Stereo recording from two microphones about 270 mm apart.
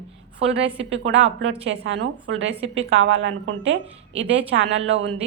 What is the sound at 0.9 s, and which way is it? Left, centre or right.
A woman's voice, right.